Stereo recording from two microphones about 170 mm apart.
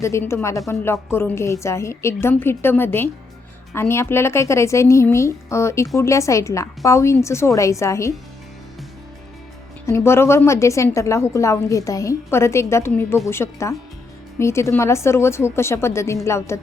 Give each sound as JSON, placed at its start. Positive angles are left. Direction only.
{"t": 0.0, "sound": "a woman's voice", "side_deg": 15}
{"t": 9.8, "sound": "a woman's voice", "side_deg": 15}